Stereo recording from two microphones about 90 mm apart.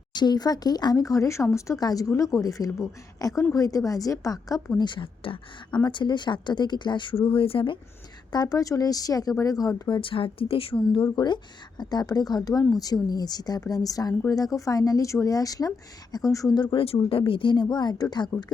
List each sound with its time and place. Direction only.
0.1 s a woman's voice: 55° left (ahead or behind)
4.8 s speech: 60° left (ahead or behind)
5.8 s speech: 60° left (ahead or behind); by 7.8 s 80° left
8.3 s a woman's voice: 45° left (ahead or behind)
9.9 s speech: 75° left (ahead or behind)
11.1 s a woman's voice: 55° left (ahead or behind); by 16.5 s 40° left (ahead or behind)
16.7 s speech: 90° left; by 18.5 s 50° left (ahead or behind)